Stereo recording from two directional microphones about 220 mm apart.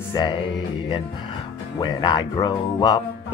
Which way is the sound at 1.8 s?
20° left (ahead or behind).